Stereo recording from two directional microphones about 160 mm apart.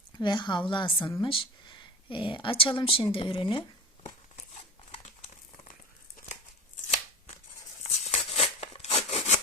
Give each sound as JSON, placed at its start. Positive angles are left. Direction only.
{"t": 0.2, "sound": "a woman's voice", "side_deg": 30}
{"t": 4.9, "sound": "crumpling", "side_deg": 50}
{"t": 6.8, "sound": "shuffling cards", "side_deg": 50}
{"t": 7.9, "sound": "a sound", "side_deg": 45}